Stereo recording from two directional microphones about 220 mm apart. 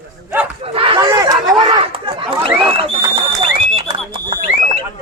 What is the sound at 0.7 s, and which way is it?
Chatter, 20° right (ahead or behind).